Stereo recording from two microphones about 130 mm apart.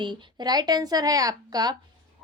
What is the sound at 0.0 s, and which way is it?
A woman's voice, 35° right (ahead or behind).